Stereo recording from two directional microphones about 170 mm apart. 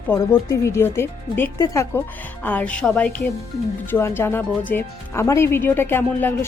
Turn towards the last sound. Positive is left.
turn(degrees=15)  # may be behind; listen again after turning